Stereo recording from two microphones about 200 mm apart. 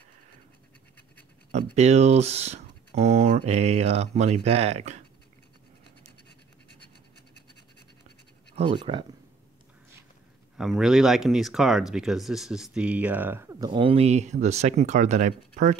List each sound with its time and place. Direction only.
1.5 s speech: 35° right (ahead or behind)
8.5 s speech: 25° right (ahead or behind)
10.6 s speech: centre (ahead or behind); by 15.8 s 40° right (ahead or behind)